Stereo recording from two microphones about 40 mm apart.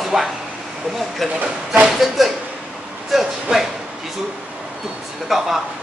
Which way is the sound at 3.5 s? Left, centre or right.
Right.